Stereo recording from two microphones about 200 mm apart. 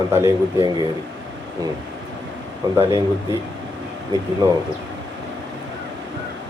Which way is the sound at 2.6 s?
20° right (ahead or behind).